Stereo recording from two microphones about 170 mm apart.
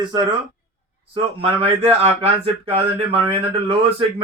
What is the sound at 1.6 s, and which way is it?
Speech, 35° right (ahead or behind).